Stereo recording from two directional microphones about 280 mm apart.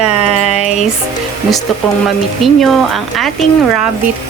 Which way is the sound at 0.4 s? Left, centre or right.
Left.